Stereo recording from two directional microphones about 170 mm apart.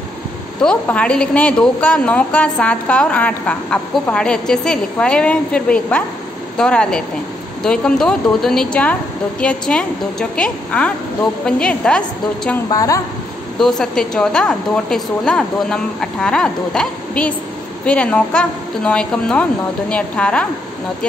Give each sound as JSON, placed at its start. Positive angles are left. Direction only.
{"t": 0.6, "sound": "a woman's voice", "side_deg": 5}
{"t": 12.6, "sound": "a woman's voice", "side_deg": 20}
{"t": 13.6, "sound": "a woman's voice", "side_deg": 0}